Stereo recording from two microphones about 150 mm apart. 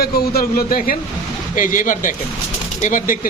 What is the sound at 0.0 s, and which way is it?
Speech, 90° left.